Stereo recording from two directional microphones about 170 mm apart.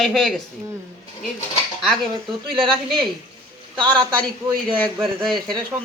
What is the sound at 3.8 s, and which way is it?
Speech, 25° right (ahead or behind).